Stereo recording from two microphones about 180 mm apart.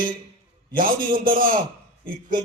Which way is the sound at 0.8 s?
50° right (ahead or behind).